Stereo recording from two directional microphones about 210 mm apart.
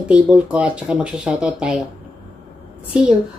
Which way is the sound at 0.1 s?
5° right (ahead or behind).